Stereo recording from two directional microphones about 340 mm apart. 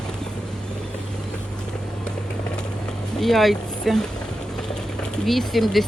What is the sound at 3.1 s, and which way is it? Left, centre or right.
Speech, centre.